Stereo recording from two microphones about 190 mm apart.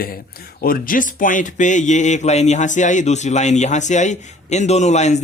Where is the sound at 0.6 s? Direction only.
50° left (ahead or behind).